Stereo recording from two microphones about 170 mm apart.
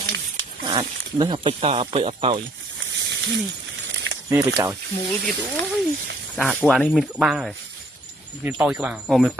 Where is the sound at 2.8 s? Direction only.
90° right.